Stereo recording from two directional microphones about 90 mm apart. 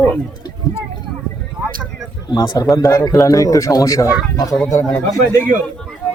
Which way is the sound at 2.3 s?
50° left (ahead or behind).